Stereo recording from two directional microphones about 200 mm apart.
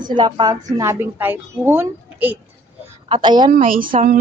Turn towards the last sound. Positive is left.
turn(degrees=-40)  # may be behind; listen again after turning